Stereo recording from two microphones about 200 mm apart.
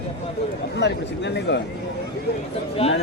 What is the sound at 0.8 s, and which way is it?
Speech, 60° left (ahead or behind).